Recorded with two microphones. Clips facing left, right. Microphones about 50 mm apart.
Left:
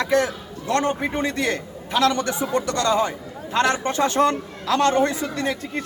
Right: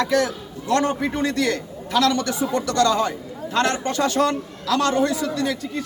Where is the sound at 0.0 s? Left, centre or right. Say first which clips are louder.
Even; left.